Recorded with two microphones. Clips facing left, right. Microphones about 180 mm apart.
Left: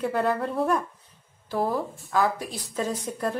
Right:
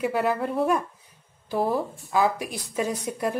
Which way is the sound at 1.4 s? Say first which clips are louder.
Right 2 dB; 20° right (ahead or behind).